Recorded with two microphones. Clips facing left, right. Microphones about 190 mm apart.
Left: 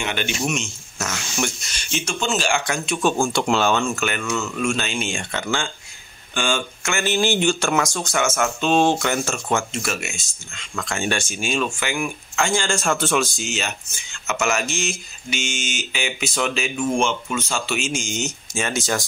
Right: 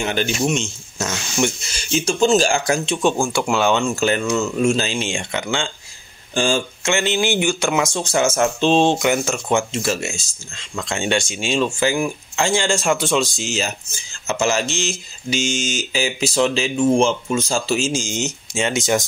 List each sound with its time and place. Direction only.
0.0 s speech: 35° right (ahead or behind)
0.9 s speech: 20° right (ahead or behind)
3.2 s speech: 10° right (ahead or behind)
3.9 s speech: 30° right (ahead or behind)
6.3 s speech: 40° right (ahead or behind)
6.8 s speech: 20° right (ahead or behind)
13.4 s speech: 35° right (ahead or behind); by 19.0 s 20° right (ahead or behind)